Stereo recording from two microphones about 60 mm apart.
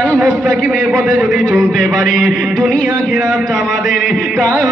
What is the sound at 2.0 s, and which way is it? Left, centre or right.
Music, centre.